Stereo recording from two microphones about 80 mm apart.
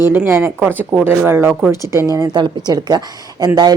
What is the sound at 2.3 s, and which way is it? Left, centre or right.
Speech, right.